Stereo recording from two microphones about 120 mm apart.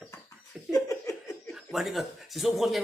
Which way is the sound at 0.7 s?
25° left (ahead or behind).